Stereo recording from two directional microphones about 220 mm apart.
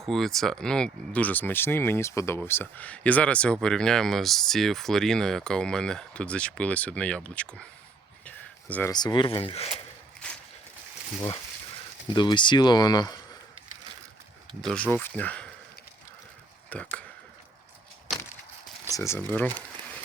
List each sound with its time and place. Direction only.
0.0 s speech: centre (ahead or behind)
8.2 s a sound: 5° left (ahead or behind)
8.9 s speech: 20° left (ahead or behind)
10.2 s a sound: 5° left (ahead or behind)
12.1 s speech: 20° left (ahead or behind)
14.6 s speech: 5° left (ahead or behind)
16.6 s speech: 5° left (ahead or behind)
18.9 s speech: 15° left (ahead or behind)